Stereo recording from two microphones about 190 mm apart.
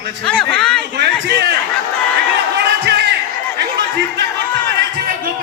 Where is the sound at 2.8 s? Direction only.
60° right (ahead or behind).